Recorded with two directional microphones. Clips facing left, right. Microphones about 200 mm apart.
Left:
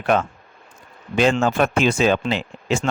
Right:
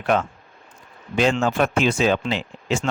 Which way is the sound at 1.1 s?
50° left (ahead or behind).